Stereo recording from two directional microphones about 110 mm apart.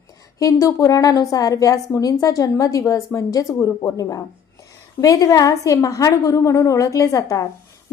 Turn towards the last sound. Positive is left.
turn(degrees=30)  # may be behind; listen again after turning